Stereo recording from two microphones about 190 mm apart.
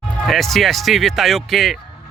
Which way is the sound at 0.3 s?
Centre (ahead or behind).